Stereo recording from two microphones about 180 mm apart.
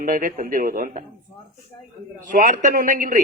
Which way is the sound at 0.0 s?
50° right (ahead or behind).